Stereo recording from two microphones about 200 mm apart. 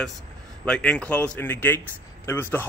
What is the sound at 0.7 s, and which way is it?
A man's voice, 5° left (ahead or behind).